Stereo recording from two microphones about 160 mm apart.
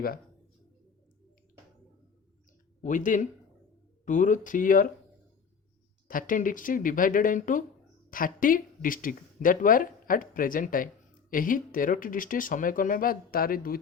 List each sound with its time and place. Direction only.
2.8 s speech: 55° left (ahead or behind)
6.1 s speech: 60° left (ahead or behind)